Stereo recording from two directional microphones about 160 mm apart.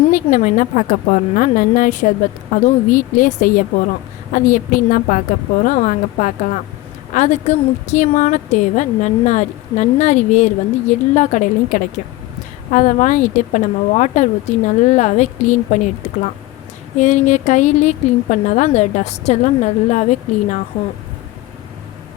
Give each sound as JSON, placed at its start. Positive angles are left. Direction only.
{"t": 0.1, "sound": "a woman's voice", "side_deg": 55}